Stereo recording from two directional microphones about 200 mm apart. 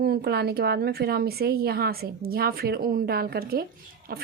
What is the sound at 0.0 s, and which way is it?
A woman's voice, 50° right (ahead or behind).